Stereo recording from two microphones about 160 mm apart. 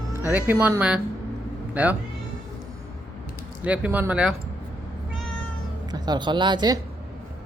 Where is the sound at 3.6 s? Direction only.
10° right (ahead or behind).